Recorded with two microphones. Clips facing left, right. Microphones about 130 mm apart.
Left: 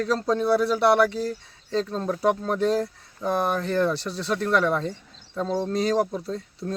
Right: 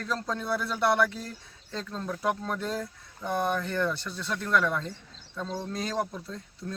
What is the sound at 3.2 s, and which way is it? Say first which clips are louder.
Speech: left 4 dB; 90° left.